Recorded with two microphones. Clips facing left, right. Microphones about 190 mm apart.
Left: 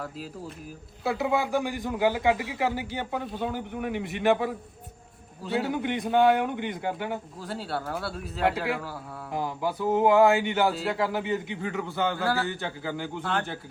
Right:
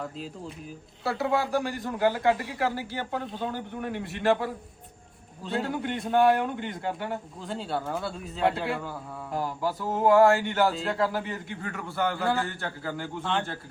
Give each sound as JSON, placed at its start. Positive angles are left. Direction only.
{"t": 0.0, "sound": "a man's voice", "side_deg": 0}
{"t": 1.5, "sound": "a man's voice", "side_deg": 15}
{"t": 3.1, "sound": "a man's voice", "side_deg": 5}
{"t": 5.4, "sound": "a man's voice", "side_deg": 5}
{"t": 5.7, "sound": "a man's voice", "side_deg": 15}
{"t": 7.4, "sound": "a man's voice", "side_deg": 5}
{"t": 9.3, "sound": "a man's voice", "side_deg": 15}
{"t": 10.7, "sound": "a man's voice", "side_deg": 5}
{"t": 11.0, "sound": "a man's voice", "side_deg": 20}
{"t": 13.3, "sound": "a man's voice", "side_deg": 5}